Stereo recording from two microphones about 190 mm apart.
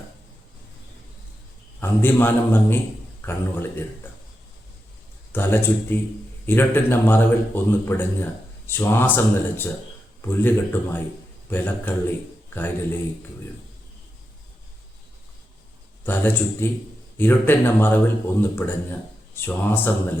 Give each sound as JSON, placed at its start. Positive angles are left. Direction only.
{"t": 1.8, "sound": "a man's voice", "side_deg": 10}
{"t": 5.3, "sound": "a man's voice", "side_deg": 10}
{"t": 16.0, "sound": "a man's voice", "side_deg": 10}